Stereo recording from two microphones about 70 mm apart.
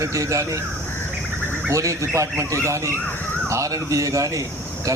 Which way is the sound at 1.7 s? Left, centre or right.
Right.